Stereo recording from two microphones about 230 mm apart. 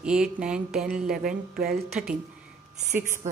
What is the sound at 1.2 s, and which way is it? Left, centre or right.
Speech, right.